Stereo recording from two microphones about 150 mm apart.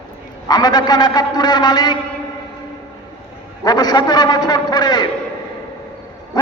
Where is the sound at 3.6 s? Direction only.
25° left (ahead or behind).